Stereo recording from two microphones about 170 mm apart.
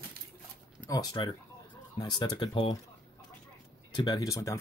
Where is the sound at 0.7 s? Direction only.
20° left (ahead or behind).